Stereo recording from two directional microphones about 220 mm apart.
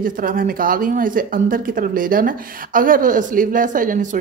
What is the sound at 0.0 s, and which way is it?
Speech, 40° right (ahead or behind).